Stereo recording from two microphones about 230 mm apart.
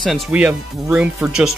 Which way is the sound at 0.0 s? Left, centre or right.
Centre.